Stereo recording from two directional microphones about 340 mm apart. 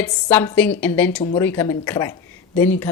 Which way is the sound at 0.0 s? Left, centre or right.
Centre.